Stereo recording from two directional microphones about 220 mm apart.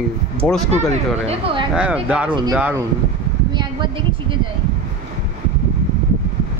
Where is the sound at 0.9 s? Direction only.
25° right (ahead or behind).